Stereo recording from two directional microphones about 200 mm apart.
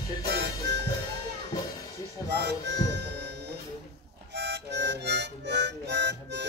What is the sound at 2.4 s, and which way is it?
Music, 60° right (ahead or behind).